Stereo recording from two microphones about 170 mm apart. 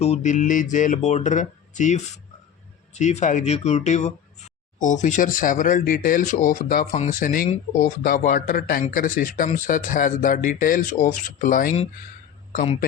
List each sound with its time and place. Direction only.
0.0 s speech: 40° left (ahead or behind)
6.9 s speech: 40° left (ahead or behind)